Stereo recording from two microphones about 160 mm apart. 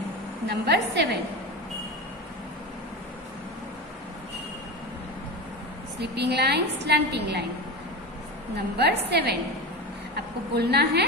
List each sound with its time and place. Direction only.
0.5 s a woman's voice: 90° right
5.9 s a woman's voice: 90° right
8.7 s a woman's voice: 90° right